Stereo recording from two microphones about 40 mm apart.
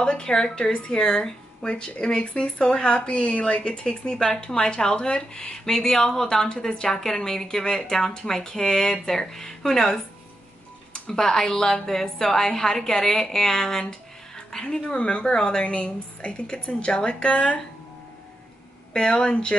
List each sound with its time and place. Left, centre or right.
0.0 s a woman's voice: centre
3.6 s a woman's voice: left
14.9 s a woman's voice: left
15.6 s a woman's voice: left
18.9 s a woman's voice: left